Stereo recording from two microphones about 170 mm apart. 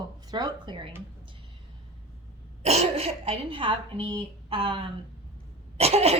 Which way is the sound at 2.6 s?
35° right (ahead or behind).